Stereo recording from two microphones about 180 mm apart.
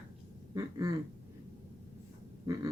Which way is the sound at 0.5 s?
20° right (ahead or behind).